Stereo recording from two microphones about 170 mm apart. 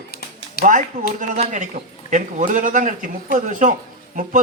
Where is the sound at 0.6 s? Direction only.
50° right (ahead or behind).